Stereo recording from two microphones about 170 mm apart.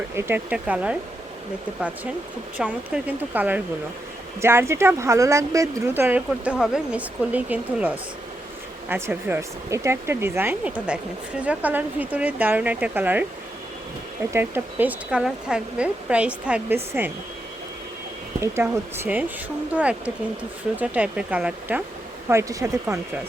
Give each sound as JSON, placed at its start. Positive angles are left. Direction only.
{"t": 0.2, "sound": "speech", "side_deg": -10}
{"t": 2.6, "sound": "speech", "side_deg": -5}
{"t": 14.3, "sound": "speech", "side_deg": -15}
{"t": 18.3, "sound": "speech", "side_deg": -15}
{"t": 22.3, "sound": "speech", "side_deg": -20}